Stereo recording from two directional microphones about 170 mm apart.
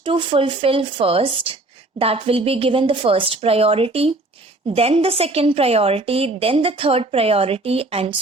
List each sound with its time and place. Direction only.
0.0 s a woman's voice: 30° right (ahead or behind)